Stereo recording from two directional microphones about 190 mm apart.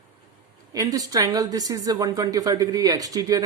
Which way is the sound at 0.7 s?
20° right (ahead or behind).